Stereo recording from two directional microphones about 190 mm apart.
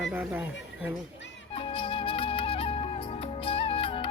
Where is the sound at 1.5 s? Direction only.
30° left (ahead or behind).